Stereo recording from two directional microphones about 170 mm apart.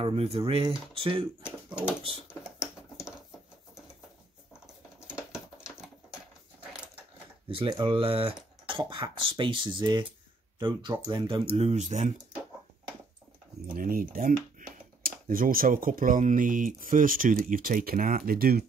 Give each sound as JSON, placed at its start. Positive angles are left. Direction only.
{"t": 0.0, "sound": "speech", "side_deg": -35}
{"t": 3.0, "sound": "patter", "side_deg": -5}
{"t": 5.0, "sound": "a sound", "side_deg": -5}
{"t": 7.4, "sound": "speech", "side_deg": -30}
{"t": 13.7, "sound": "speech", "side_deg": -55}